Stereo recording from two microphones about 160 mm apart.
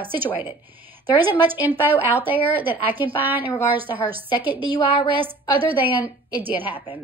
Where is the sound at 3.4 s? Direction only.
30° left (ahead or behind).